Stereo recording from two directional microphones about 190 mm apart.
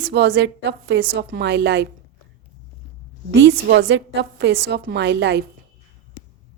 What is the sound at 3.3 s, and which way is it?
A woman's voice, 65° right (ahead or behind).